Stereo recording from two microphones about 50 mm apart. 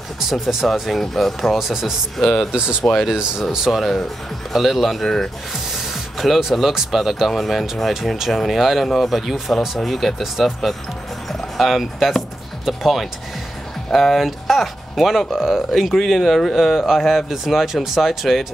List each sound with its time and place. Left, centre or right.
0.3 s speech: centre
2.2 s speech: centre
2.5 s speech: centre
2.8 s speech: centre
11.2 s a sound: centre
12.6 s speech: centre